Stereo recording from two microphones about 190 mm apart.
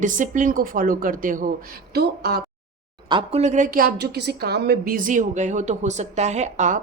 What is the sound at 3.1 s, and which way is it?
A woman's voice, 30° right (ahead or behind).